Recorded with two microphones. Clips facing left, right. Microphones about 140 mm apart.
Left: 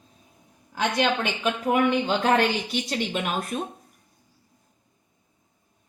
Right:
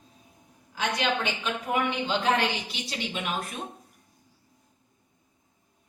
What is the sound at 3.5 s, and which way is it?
Speech, 40° left (ahead or behind).